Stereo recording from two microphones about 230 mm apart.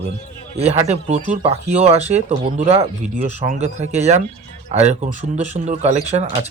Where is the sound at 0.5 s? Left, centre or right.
Right.